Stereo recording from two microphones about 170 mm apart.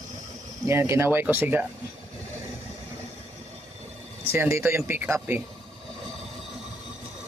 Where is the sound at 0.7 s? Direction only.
15° right (ahead or behind).